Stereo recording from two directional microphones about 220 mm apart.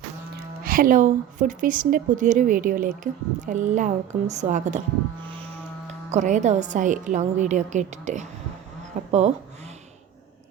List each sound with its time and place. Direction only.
0.6 s speech: 40° right (ahead or behind)
5.9 s speech: 30° right (ahead or behind)